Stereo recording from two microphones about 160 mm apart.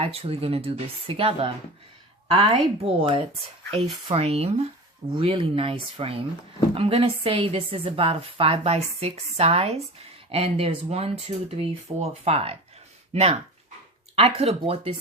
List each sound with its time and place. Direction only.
0.0 s a woman's voice: 40° right (ahead or behind)
14.2 s a woman's voice: 40° right (ahead or behind)